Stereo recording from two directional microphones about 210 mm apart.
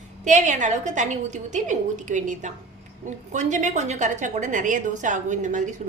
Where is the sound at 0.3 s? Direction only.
35° right (ahead or behind).